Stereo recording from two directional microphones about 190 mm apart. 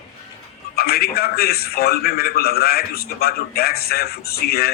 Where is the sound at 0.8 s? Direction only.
55° left (ahead or behind).